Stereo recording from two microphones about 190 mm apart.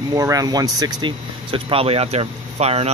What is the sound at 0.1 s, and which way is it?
Speech, 20° right (ahead or behind).